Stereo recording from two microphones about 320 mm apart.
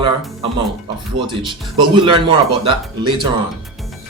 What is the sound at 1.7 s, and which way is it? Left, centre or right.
Speech, centre.